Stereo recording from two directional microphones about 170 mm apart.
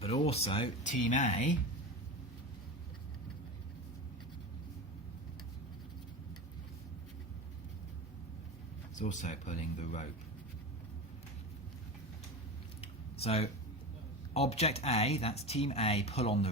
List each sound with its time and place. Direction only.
0.0 s speech: 35° left (ahead or behind)
0.9 s speech: 45° left (ahead or behind)
9.0 s speech: 45° left (ahead or behind)
12.8 s a sound: 35° left (ahead or behind)
14.3 s speech: 40° left (ahead or behind)